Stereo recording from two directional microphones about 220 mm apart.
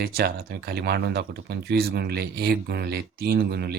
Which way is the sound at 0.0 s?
45° right (ahead or behind).